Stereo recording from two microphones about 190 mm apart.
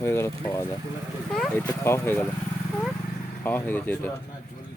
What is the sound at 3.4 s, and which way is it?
Speech, 10° left (ahead or behind).